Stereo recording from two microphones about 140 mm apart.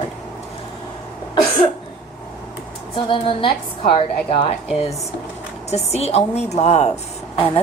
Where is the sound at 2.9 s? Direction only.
40° left (ahead or behind).